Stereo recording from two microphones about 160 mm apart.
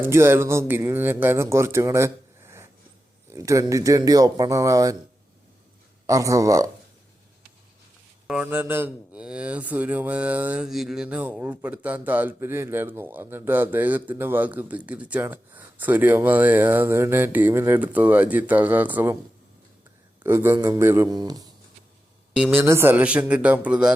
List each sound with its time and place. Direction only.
0.0 s speech: 15° right (ahead or behind)
6.1 s speech: 20° right (ahead or behind)
8.3 s speech: 10° right (ahead or behind)
20.2 s speech: 15° right (ahead or behind)
22.3 s a woman's voice: 5° right (ahead or behind)